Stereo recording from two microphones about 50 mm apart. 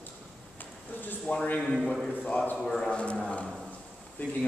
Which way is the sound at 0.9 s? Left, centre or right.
Left.